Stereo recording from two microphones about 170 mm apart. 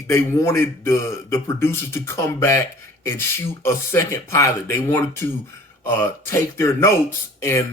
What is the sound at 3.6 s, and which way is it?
A man's voice, 15° left (ahead or behind).